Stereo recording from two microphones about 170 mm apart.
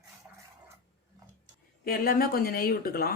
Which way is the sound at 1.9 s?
60° left (ahead or behind).